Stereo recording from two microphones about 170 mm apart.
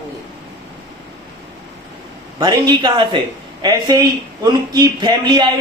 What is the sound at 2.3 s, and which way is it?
A man's voice, 25° right (ahead or behind).